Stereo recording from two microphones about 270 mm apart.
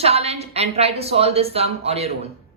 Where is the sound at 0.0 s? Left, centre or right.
Right.